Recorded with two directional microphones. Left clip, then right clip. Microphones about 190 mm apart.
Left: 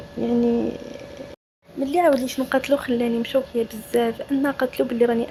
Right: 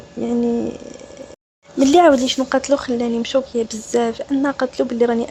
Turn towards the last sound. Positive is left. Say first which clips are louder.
# right 2 dB
turn(degrees=-10)  # may be behind; listen again after turning